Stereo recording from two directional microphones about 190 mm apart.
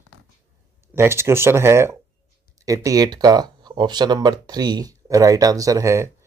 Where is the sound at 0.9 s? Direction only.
15° right (ahead or behind).